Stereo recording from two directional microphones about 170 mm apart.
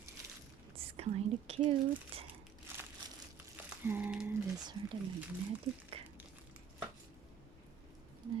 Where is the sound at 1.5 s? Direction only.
35° right (ahead or behind).